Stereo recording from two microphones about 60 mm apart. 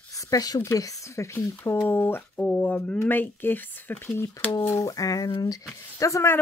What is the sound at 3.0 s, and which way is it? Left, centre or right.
Speech, left.